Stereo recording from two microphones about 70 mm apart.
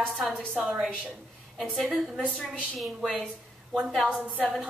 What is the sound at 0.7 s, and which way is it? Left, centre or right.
A woman's voice, centre.